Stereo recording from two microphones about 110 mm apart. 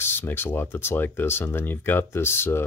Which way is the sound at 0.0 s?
20° left (ahead or behind).